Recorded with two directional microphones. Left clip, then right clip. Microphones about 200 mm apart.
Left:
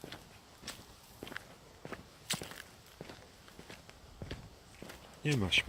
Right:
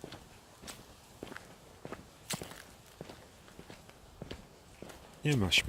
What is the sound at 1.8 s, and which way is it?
Walk, centre (ahead or behind).